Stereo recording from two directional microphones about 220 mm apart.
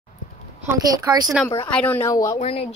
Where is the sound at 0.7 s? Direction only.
15° right (ahead or behind).